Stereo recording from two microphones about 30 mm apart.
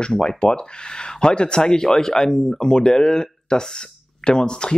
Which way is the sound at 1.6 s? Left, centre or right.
Centre.